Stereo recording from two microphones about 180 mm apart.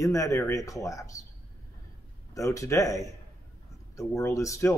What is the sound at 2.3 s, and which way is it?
A man's voice, 15° left (ahead or behind).